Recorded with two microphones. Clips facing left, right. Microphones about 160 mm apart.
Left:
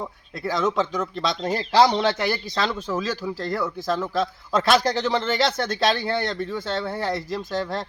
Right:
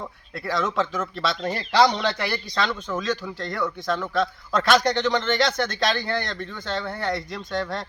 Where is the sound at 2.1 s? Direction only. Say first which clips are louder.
Left 2 dB; 25° left (ahead or behind).